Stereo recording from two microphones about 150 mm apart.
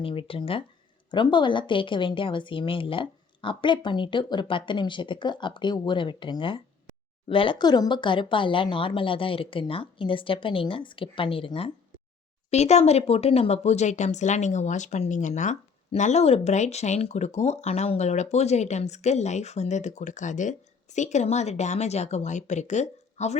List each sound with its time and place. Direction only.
0.0 s a woman's voice: 35° left (ahead or behind)